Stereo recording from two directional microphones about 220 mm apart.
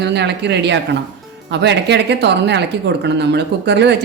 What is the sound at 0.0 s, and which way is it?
Speech, 50° right (ahead or behind).